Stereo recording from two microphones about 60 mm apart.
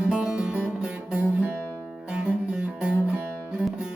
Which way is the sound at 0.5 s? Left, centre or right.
Right.